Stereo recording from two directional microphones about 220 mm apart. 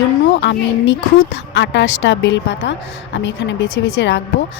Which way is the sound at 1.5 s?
55° left (ahead or behind).